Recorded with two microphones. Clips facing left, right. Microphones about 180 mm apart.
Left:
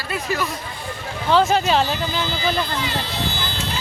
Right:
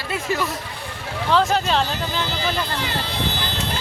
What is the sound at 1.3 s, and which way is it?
Speech, centre (ahead or behind).